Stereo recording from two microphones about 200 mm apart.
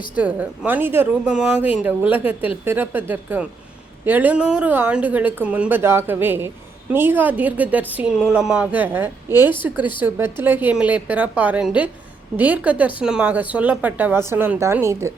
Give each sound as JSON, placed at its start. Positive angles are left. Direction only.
{"t": 0.2, "sound": "speech", "side_deg": -5}